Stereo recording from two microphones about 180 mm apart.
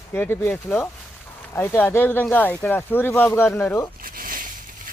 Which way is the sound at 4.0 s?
50° right (ahead or behind).